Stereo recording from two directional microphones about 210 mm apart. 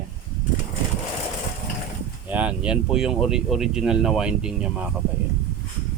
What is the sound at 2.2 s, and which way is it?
Speech, 5° right (ahead or behind).